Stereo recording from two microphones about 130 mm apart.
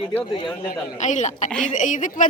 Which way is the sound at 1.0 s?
65° left (ahead or behind).